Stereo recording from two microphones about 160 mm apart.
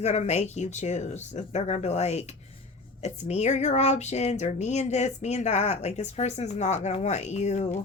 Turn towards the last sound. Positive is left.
turn(degrees=45)  # may be behind; listen again after turning